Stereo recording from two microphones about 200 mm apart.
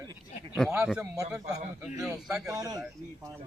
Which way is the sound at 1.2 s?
15° right (ahead or behind).